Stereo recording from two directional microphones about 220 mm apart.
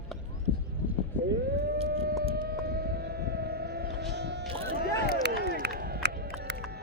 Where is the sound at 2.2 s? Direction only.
45° right (ahead or behind).